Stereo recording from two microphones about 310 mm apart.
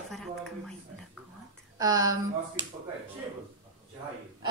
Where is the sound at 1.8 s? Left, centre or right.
Centre.